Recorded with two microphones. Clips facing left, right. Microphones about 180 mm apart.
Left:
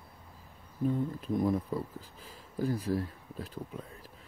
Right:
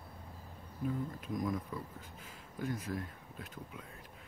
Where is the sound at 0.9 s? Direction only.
30° left (ahead or behind).